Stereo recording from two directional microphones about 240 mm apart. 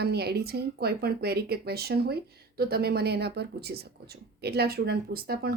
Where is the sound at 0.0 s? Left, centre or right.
Right.